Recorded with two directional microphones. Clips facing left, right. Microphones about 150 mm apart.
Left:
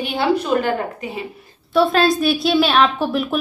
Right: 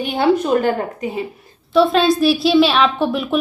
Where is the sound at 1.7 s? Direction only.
Centre (ahead or behind).